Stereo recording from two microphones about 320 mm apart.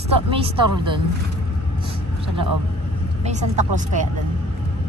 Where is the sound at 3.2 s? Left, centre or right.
Right.